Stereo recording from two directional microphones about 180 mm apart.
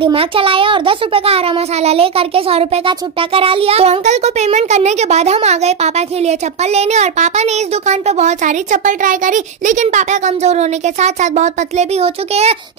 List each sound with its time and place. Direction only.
0.0 s a child's voice: 30° right (ahead or behind)